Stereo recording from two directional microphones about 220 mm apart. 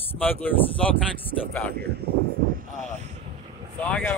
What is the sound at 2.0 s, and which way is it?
Speech, 45° right (ahead or behind).